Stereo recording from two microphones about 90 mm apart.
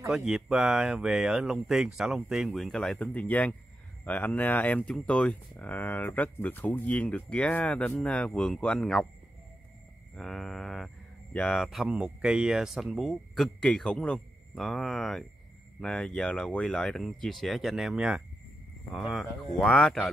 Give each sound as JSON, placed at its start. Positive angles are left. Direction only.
{"t": 0.0, "sound": "speech", "side_deg": -5}
{"t": 3.0, "sound": "speech", "side_deg": 15}
{"t": 10.1, "sound": "speech", "side_deg": 5}
{"t": 11.9, "sound": "speech", "side_deg": -10}